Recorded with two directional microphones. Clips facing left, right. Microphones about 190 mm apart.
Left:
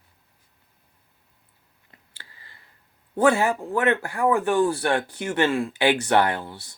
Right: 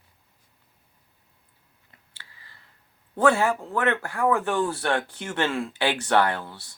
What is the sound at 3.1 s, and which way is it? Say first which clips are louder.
Speech: left 1 dB; 15° left (ahead or behind).